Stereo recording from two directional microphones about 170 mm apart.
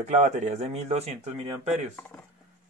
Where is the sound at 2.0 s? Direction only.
10° left (ahead or behind).